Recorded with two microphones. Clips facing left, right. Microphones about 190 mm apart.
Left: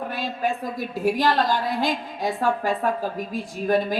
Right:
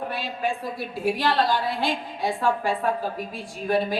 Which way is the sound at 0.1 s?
40° left (ahead or behind).